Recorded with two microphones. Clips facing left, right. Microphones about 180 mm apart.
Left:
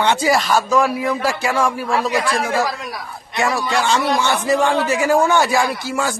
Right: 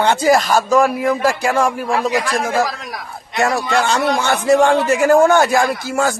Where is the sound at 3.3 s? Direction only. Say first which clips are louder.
Right 3 dB; 45° right (ahead or behind).